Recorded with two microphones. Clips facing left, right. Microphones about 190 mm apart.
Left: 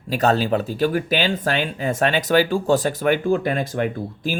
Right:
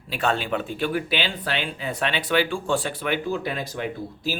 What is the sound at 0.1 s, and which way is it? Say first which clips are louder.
Speech: left 6 dB; 40° left (ahead or behind).